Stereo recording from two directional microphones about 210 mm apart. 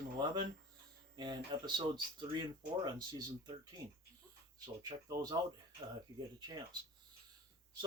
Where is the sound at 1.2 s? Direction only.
20° right (ahead or behind).